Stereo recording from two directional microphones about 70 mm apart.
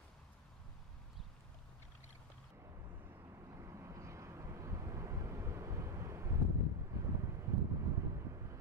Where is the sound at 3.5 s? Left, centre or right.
Right.